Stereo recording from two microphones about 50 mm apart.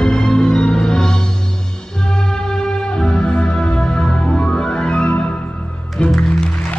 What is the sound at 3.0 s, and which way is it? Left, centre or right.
Music, centre.